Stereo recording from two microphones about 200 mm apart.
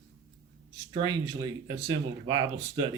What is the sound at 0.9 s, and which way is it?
Speech, 20° right (ahead or behind).